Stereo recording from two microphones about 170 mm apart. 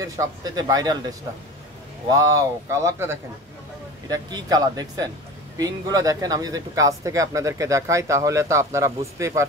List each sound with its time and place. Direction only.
0.0 s speech: 20° right (ahead or behind)